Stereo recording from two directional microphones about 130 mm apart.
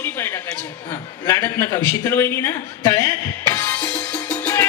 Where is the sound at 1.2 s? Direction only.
20° left (ahead or behind).